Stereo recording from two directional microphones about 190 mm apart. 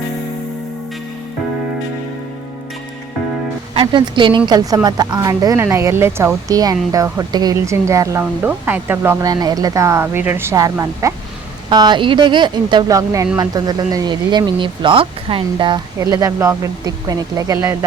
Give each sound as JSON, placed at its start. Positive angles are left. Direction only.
{"t": 3.8, "sound": "speech", "side_deg": -25}